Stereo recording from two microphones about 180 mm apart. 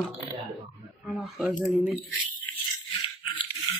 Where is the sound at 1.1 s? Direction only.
5° right (ahead or behind).